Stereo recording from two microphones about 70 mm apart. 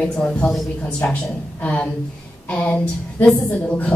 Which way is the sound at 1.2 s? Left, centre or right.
Centre.